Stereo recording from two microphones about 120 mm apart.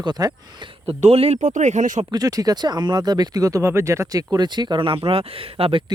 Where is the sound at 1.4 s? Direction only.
90° right.